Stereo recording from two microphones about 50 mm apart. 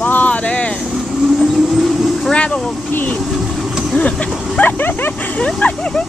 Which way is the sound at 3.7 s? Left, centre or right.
Centre.